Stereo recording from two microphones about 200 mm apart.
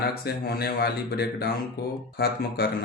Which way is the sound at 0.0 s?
55° left (ahead or behind).